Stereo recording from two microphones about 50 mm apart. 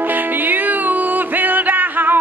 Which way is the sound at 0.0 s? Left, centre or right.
Right.